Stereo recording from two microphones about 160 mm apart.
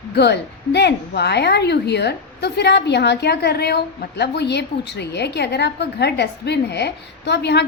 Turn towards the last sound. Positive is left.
turn(degrees=90)